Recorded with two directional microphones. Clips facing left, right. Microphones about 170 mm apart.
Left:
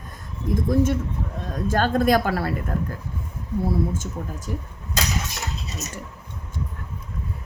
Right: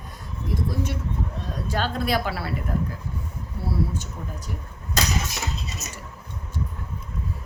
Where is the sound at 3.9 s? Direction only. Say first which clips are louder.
Left 3 dB; 45° left (ahead or behind).